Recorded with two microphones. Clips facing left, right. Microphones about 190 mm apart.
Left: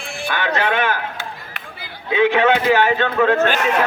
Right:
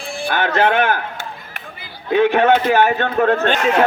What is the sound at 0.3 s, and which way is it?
Speech, 50° right (ahead or behind).